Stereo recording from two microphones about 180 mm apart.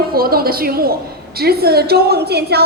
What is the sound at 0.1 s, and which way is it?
A woman's voice, 55° right (ahead or behind).